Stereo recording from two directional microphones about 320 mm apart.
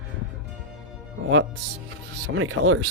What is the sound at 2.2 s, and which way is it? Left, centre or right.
Music, right.